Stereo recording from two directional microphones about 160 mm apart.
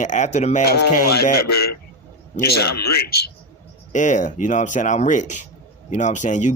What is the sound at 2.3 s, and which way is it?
Speech, 45° left (ahead or behind).